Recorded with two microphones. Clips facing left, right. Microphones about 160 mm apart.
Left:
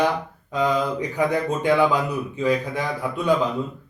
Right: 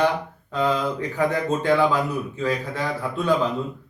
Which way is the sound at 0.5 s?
15° left (ahead or behind).